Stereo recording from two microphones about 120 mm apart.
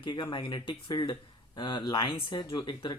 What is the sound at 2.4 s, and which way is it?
Speech, 35° left (ahead or behind).